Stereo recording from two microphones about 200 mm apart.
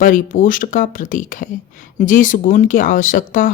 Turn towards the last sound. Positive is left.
turn(degrees=40)  # may be behind; listen again after turning